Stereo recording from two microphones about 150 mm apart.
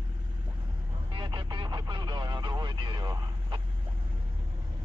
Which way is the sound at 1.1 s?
30° right (ahead or behind).